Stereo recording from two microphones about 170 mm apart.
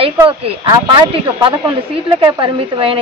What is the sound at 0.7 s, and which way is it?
Speech, 25° right (ahead or behind).